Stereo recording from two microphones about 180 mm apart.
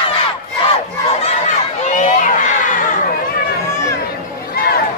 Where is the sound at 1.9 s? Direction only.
40° left (ahead or behind).